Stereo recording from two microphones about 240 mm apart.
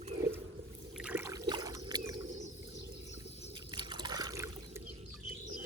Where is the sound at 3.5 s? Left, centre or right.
Centre.